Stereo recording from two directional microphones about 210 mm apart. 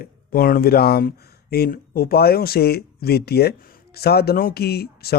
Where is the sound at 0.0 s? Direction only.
45° left (ahead or behind).